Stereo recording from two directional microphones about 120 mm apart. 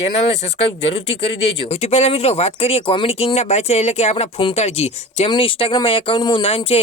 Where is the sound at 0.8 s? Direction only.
55° left (ahead or behind).